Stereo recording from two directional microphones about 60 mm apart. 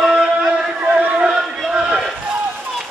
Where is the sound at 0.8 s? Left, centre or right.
Right.